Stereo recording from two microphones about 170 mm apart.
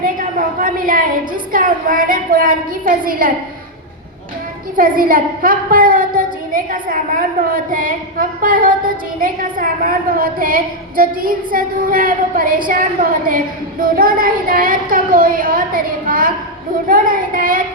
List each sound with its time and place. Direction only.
0.0 s a sound: 55° right (ahead or behind)
1.5 s a woman's voice: 55° right (ahead or behind)
4.8 s a woman's voice: 55° right (ahead or behind)